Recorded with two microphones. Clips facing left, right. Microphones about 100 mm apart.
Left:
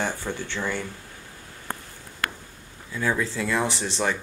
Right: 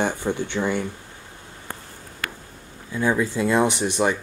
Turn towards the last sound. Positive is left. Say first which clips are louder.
# right 5 dB
turn(degrees=-15)  # may be behind; listen again after turning